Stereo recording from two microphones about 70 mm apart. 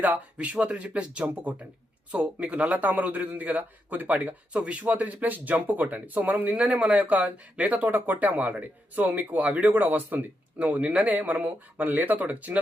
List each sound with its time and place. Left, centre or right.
0.0 s a man's voice: right